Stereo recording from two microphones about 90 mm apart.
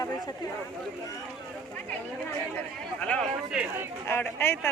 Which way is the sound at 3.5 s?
5° right (ahead or behind).